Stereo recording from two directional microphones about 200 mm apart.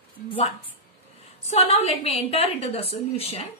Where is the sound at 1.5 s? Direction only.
30° left (ahead or behind).